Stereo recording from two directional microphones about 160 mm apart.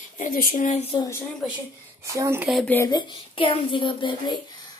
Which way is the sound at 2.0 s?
20° right (ahead or behind).